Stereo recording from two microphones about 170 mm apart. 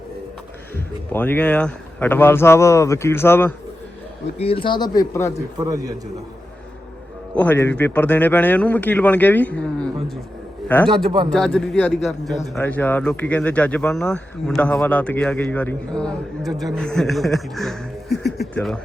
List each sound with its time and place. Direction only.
1.1 s speech: 10° left (ahead or behind)
4.4 s speech: 35° left (ahead or behind)
5.5 s a man's voice: 20° right (ahead or behind)
7.3 s speech: 10° left (ahead or behind)
10.8 s a man's voice: 30° right (ahead or behind)
11.3 s a man's voice: 5° left (ahead or behind)